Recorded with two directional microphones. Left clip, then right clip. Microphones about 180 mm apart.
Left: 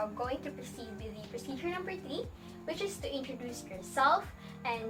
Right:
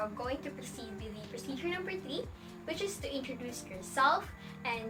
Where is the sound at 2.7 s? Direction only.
20° right (ahead or behind).